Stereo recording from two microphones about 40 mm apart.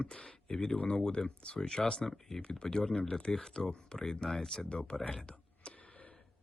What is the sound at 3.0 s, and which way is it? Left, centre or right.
Speech, left.